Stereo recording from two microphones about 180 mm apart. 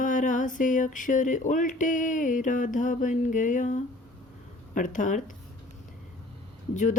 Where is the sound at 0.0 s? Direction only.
45° left (ahead or behind).